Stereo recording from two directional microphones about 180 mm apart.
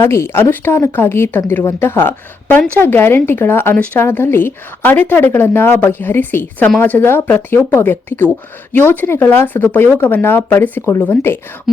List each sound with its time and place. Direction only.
0.0 s a woman's voice: 15° left (ahead or behind)